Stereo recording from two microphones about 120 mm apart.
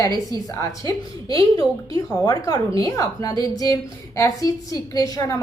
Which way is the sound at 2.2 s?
30° left (ahead or behind).